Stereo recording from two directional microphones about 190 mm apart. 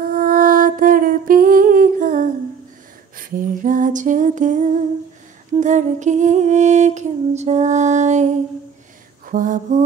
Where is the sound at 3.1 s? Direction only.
45° right (ahead or behind).